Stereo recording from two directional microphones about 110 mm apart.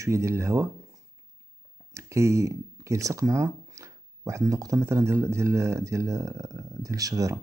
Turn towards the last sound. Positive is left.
turn(degrees=-30)  # may be behind; listen again after turning